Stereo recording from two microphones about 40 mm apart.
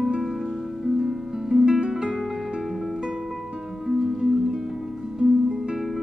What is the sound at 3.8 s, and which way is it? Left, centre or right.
Music, centre.